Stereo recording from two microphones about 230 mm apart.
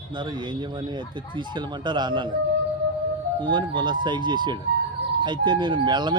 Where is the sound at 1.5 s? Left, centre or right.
Centre.